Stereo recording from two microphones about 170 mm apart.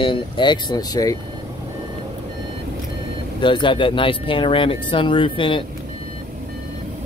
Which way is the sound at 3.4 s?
30° left (ahead or behind).